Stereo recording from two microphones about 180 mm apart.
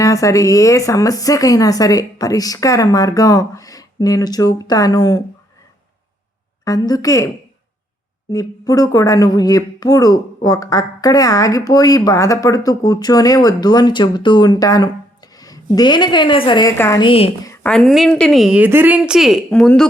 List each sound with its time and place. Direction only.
0.0 s speech: 20° left (ahead or behind)
6.7 s speech: 20° left (ahead or behind)
8.3 s speech: 20° left (ahead or behind)
16.7 s a woman's voice: 15° left (ahead or behind)
17.0 s speech: 30° left (ahead or behind)
17.4 s a sound: 15° left (ahead or behind)
17.7 s a woman's voice: centre (ahead or behind)